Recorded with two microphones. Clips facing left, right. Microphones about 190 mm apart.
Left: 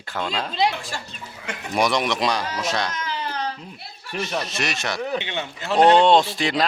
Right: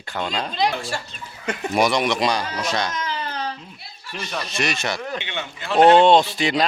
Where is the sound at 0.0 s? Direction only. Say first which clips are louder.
Right 1 dB; centre (ahead or behind).